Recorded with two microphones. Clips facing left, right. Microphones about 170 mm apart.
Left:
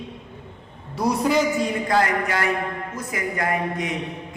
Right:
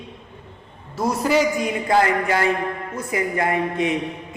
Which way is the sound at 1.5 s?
20° right (ahead or behind).